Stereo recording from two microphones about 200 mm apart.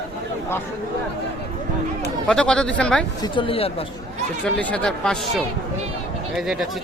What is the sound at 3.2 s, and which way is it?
Speech, 25° left (ahead or behind).